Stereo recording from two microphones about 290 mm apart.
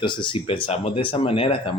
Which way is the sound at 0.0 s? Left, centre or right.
Centre.